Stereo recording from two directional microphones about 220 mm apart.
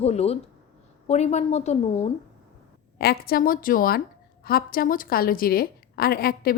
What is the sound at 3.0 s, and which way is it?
A woman's voice, 45° left (ahead or behind).